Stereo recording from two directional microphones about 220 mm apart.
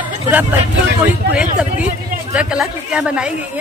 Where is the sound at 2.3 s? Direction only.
5° right (ahead or behind).